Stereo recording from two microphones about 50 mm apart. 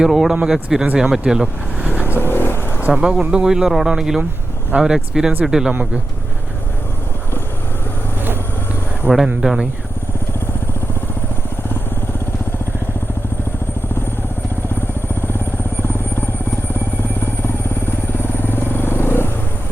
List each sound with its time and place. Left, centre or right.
0.0 s speech: centre
2.0 s vehicle: left
2.9 s speech: centre
4.7 s speech: right
5.1 s speech: centre
9.0 s speech: centre
18.2 s vehicle: left